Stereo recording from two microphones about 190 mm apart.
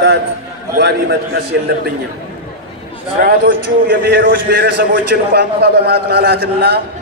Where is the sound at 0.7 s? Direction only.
60° right (ahead or behind).